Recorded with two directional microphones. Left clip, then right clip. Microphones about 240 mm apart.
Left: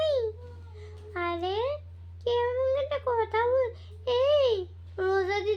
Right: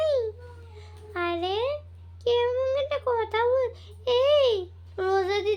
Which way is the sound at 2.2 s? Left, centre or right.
Right.